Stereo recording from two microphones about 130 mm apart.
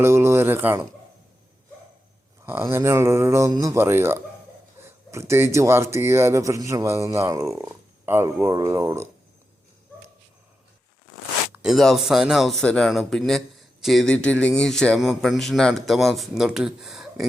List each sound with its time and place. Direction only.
0.0 s speech: 20° right (ahead or behind)
2.4 s speech: 20° right (ahead or behind)
11.6 s speech: centre (ahead or behind)